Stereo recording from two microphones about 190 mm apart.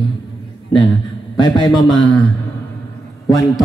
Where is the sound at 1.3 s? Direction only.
25° left (ahead or behind).